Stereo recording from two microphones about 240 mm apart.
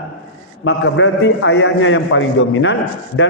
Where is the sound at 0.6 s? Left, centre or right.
Left.